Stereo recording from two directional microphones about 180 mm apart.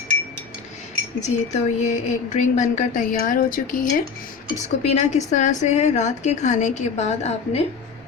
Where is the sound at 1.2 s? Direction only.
40° left (ahead or behind).